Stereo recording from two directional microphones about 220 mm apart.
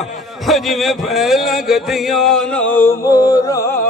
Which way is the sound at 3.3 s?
15° left (ahead or behind).